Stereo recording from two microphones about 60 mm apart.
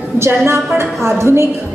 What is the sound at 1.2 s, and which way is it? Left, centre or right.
Speech, right.